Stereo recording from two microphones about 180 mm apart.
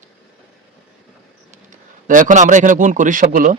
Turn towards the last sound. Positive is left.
turn(degrees=-45)  # may be behind; listen again after turning